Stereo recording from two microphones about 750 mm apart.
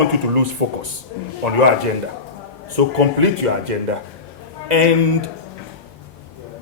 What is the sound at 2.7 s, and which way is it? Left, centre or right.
A man's voice, right.